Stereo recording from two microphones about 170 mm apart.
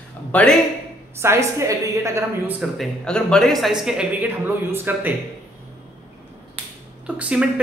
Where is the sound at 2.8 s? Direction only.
5° left (ahead or behind); by 5.1 s 10° right (ahead or behind).